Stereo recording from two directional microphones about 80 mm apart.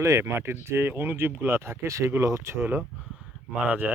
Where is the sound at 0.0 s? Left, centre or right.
Right.